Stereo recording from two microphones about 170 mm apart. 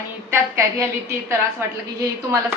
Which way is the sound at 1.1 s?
15° right (ahead or behind).